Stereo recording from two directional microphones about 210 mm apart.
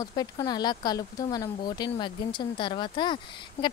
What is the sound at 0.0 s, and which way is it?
Speech, 20° left (ahead or behind).